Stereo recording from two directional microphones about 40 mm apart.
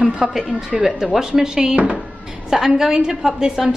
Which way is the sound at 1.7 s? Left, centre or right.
Right.